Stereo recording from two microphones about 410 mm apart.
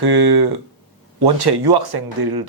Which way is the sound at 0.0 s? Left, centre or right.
Right.